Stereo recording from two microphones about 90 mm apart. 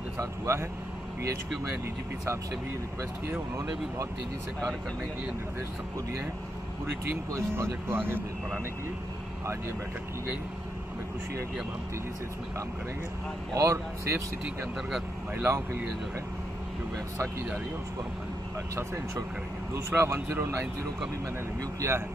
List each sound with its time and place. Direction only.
0.2 s vehicle: 30° right (ahead or behind)
3.0 s speech: 25° right (ahead or behind)
7.2 s speech: 35° right (ahead or behind)
13.6 s speech: 35° right (ahead or behind)
15.4 s speech: 30° right (ahead or behind)
19.9 s speech: 30° right (ahead or behind)